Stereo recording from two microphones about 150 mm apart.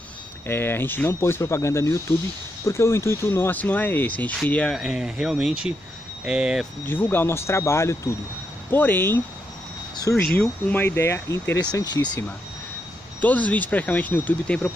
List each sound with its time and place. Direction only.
0.5 s speech: 15° left (ahead or behind); by 6.7 s 5° right (ahead or behind)
6.9 s speech: 15° left (ahead or behind)
10.2 s speech: 10° left (ahead or behind); by 12.1 s 30° left (ahead or behind)
13.2 s speech: 10° left (ahead or behind)